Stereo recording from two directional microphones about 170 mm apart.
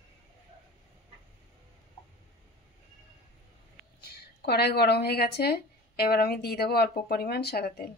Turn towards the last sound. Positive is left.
turn(degrees=70)  # may be behind; listen again after turning